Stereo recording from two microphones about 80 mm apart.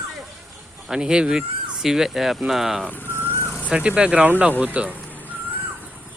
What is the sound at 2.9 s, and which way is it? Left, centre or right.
Vehicle, left.